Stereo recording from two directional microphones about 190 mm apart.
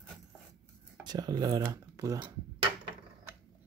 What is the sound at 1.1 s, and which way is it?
Speech, 20° right (ahead or behind).